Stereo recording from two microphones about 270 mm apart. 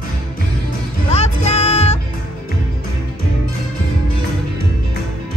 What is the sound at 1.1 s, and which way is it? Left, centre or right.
Music, left.